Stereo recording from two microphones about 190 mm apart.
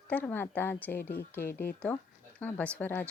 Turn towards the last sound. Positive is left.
turn(degrees=10)  # may be behind; listen again after turning